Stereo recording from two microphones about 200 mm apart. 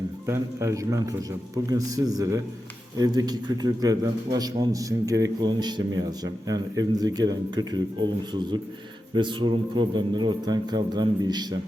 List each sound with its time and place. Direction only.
0.3 s a man's voice: 15° right (ahead or behind)